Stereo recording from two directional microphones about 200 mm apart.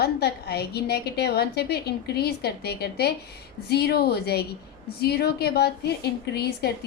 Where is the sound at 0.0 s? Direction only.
55° left (ahead or behind).